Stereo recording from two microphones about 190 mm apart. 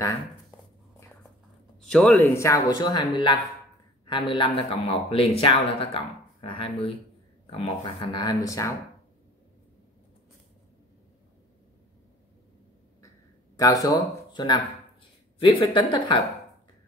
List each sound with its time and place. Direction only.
1.9 s speech: 5° left (ahead or behind)
2.3 s speech: 15° left (ahead or behind)
13.6 s speech: 20° left (ahead or behind)